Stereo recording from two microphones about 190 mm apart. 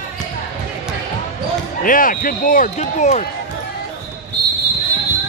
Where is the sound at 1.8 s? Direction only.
45° left (ahead or behind).